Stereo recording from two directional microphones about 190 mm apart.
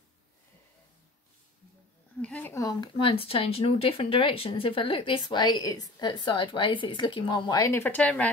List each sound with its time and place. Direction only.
2.2 s speech: 10° left (ahead or behind)